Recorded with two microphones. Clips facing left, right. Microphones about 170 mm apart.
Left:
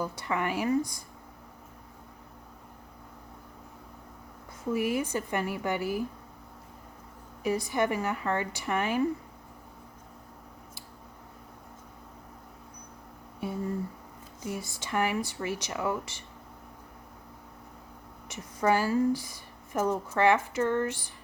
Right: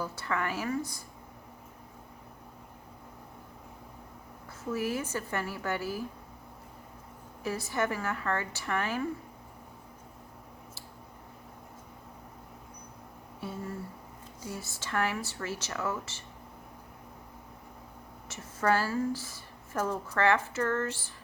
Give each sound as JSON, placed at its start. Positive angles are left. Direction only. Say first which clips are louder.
{"t": 0.0, "sound": "speech", "louder": "left 2 dB", "side_deg": 15}
{"t": 4.7, "sound": "speech", "louder": "left 4 dB", "side_deg": 15}
{"t": 7.4, "sound": "speech", "louder": "left 4 dB", "side_deg": 15}
{"t": 13.4, "sound": "speech", "louder": "left 6 dB", "side_deg": 15}
{"t": 18.3, "sound": "speech", "louder": "left 2 dB", "side_deg": 15}